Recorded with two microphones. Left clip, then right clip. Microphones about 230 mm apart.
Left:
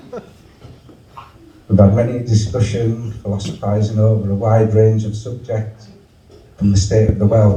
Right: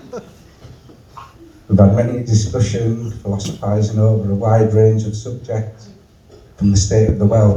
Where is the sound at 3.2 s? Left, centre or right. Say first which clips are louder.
Left 1 dB; right.